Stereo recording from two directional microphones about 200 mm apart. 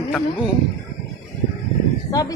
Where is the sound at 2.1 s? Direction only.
20° left (ahead or behind).